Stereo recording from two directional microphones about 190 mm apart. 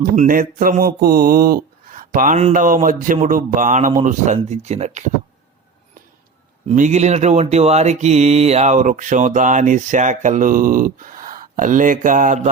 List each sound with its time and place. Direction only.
0.0 s mantra: 45° right (ahead or behind)
6.7 s mantra: 40° right (ahead or behind)